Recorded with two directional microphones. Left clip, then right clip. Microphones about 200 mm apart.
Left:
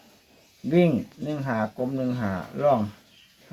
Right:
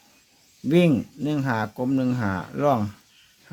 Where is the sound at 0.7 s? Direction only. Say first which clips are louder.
Right 2 dB; 60° right (ahead or behind).